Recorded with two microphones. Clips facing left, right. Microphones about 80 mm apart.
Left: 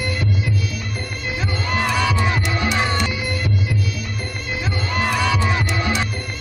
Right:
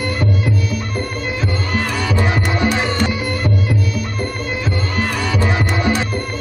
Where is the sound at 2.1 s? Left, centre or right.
Right.